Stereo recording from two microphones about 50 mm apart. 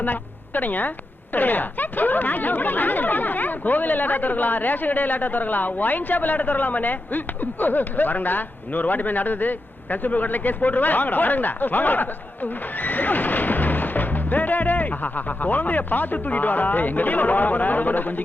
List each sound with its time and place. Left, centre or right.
0.0 s speech: left